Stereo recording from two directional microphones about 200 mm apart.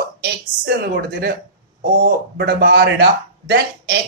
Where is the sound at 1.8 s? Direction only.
50° right (ahead or behind).